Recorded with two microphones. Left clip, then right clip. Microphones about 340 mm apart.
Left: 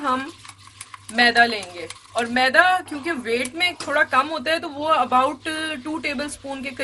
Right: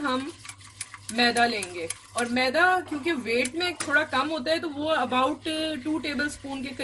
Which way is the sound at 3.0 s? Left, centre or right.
Left.